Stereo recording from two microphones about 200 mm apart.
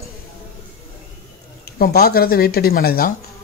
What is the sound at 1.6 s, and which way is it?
Speech, 50° left (ahead or behind).